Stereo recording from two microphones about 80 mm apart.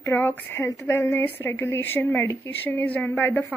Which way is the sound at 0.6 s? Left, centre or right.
Left.